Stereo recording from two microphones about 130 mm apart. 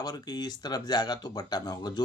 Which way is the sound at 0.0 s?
30° left (ahead or behind).